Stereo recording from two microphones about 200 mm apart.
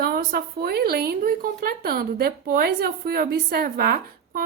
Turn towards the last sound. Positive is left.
turn(degrees=-50)  # may be behind; listen again after turning